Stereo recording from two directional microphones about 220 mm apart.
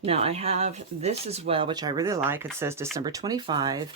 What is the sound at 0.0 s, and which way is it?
Speech, 25° right (ahead or behind).